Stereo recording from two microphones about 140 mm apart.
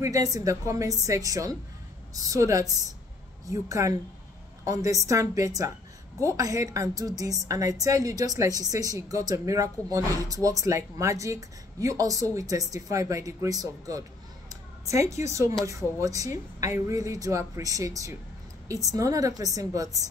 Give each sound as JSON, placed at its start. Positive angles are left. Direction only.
{"t": 0.0, "sound": "a woman's voice", "side_deg": -25}
{"t": 14.5, "sound": "a sound", "side_deg": -20}
{"t": 15.2, "sound": "a woman's voice", "side_deg": -20}